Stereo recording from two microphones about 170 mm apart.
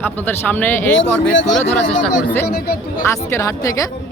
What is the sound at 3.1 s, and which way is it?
Speech, 15° left (ahead or behind).